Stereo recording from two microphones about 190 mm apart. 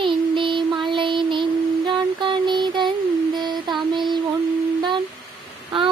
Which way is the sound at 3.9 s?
25° right (ahead or behind).